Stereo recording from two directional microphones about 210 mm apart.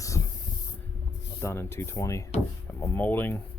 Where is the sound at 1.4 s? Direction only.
10° left (ahead or behind).